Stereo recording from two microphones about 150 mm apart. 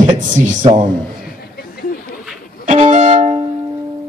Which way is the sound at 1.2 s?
90° left.